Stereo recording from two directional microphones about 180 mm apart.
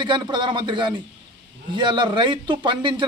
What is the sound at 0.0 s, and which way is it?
Speech, 25° right (ahead or behind).